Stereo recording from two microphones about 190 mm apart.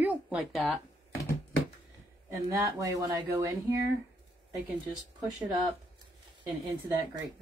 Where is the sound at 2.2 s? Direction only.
15° right (ahead or behind).